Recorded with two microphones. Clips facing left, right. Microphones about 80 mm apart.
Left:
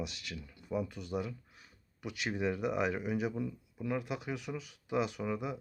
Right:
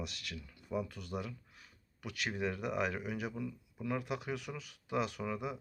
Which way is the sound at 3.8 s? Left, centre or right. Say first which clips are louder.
Left 1 dB; centre.